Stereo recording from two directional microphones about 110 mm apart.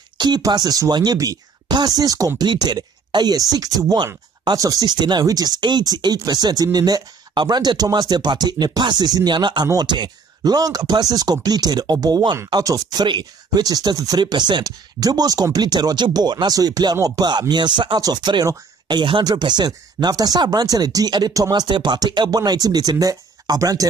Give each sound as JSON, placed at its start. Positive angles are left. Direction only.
{"t": 0.2, "sound": "speech", "side_deg": -40}
{"t": 2.4, "sound": "speech", "side_deg": -45}